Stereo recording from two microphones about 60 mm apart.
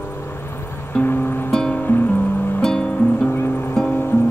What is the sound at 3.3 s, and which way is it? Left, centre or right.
Music, left.